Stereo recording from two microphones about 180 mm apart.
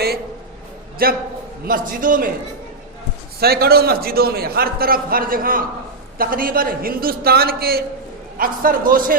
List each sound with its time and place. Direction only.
1.0 s a man's voice: 55° right (ahead or behind)
3.4 s a man's voice: 60° right (ahead or behind)